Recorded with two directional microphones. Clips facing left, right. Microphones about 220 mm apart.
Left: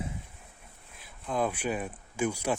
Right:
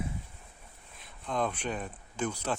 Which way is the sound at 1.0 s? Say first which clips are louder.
Left 2 dB; 5° left (ahead or behind).